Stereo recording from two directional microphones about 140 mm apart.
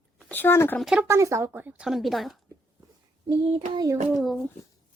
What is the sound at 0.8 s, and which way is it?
Speech, 5° right (ahead or behind).